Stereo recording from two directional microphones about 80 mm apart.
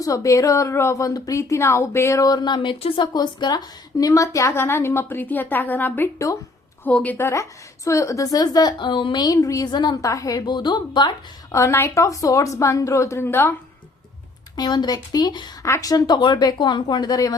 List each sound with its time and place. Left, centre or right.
0.0 s speech: left
2.2 s speech: left; by 7.3 s centre
7.9 s a woman's voice: left
9.2 s a woman's voice: left
9.7 s speech: left
11.5 s speech: left
14.5 s speech: left
15.6 s speech: left